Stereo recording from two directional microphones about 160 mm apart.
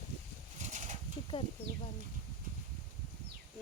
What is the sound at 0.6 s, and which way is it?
Pigeon, 50° right (ahead or behind).